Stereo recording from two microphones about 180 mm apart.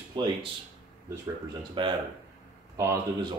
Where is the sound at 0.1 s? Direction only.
25° right (ahead or behind).